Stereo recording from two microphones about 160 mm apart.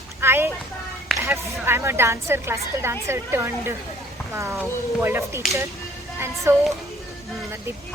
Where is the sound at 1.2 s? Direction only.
15° right (ahead or behind).